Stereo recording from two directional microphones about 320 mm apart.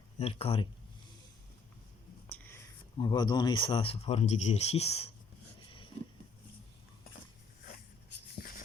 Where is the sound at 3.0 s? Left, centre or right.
Centre.